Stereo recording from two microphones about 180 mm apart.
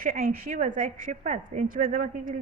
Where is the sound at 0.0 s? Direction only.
50° right (ahead or behind).